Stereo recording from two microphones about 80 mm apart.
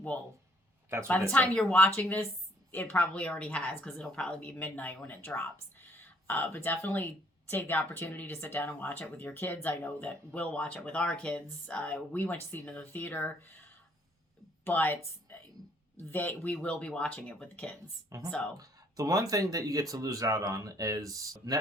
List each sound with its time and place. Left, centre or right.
1.3 s speech: centre
14.6 s speech: left
18.1 s speech: right